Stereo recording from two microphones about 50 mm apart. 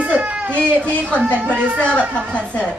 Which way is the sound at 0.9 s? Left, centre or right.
Left.